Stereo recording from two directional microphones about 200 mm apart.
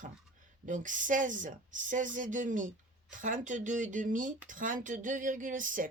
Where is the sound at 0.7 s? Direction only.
40° right (ahead or behind).